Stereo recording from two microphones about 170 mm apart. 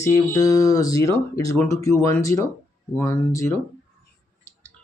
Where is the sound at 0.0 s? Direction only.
20° left (ahead or behind).